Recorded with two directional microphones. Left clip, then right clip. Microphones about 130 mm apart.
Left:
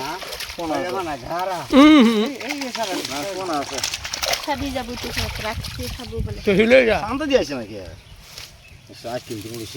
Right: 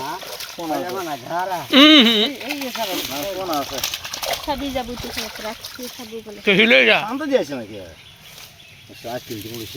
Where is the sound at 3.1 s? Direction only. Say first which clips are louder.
Right 1 dB; 45° right (ahead or behind).